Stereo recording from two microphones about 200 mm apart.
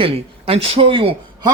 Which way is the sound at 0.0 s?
30° right (ahead or behind).